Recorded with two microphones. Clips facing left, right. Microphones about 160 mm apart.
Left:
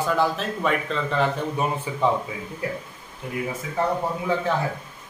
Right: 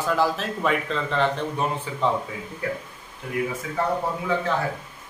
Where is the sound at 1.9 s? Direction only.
15° left (ahead or behind).